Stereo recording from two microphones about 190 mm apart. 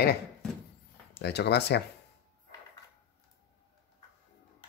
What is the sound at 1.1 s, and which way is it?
Speech, 60° left (ahead or behind).